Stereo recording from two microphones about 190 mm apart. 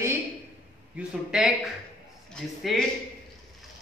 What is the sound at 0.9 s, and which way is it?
A man's voice, 5° right (ahead or behind).